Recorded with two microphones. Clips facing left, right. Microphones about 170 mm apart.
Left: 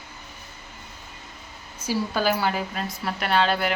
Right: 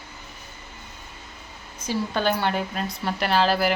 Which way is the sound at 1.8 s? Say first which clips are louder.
Even; 5° left (ahead or behind).